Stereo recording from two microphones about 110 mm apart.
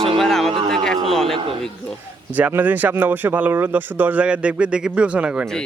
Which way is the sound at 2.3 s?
15° right (ahead or behind).